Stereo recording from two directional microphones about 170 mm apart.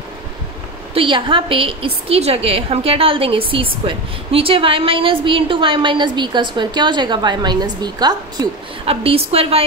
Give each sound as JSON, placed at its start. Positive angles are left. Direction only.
{"t": 0.9, "sound": "a woman's voice", "side_deg": -30}